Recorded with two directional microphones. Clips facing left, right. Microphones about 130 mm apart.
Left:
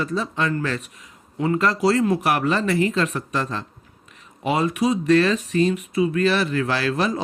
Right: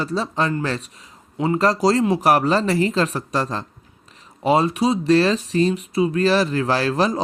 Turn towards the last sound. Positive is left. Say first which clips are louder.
# right 3 dB
turn(degrees=-35)  # may be behind; listen again after turning